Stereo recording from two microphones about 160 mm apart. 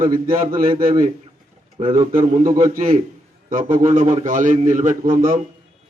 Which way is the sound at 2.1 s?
55° right (ahead or behind).